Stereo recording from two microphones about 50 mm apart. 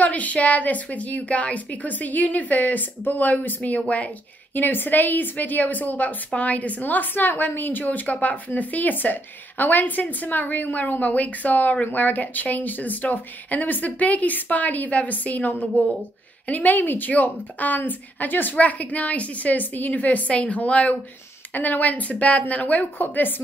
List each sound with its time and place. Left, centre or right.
0.0 s a woman's voice: left
4.6 s a woman's voice: left